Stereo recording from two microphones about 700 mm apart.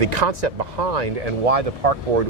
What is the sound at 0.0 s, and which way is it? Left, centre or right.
Speech, right.